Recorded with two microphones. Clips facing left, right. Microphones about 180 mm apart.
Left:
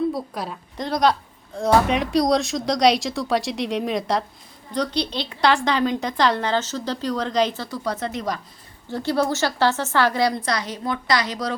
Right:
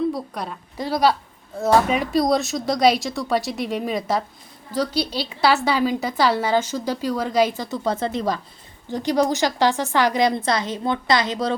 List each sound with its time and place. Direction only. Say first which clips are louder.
0.1 s a woman's voice: even; centre (ahead or behind); by 8.4 s 30° right (ahead or behind)
8.9 s a woman's voice: right 2 dB; 15° right (ahead or behind)